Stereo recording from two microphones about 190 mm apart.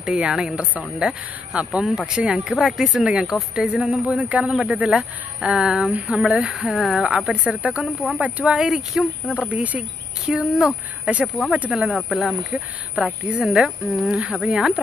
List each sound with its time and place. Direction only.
0.0 s speech: 5° right (ahead or behind)